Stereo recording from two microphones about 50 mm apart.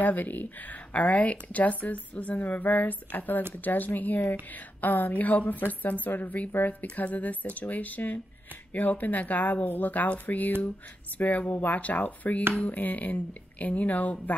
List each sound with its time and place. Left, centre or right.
0.0 s speech: left